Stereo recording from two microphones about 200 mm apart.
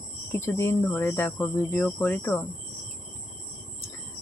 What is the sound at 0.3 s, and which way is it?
Speech, 10° left (ahead or behind).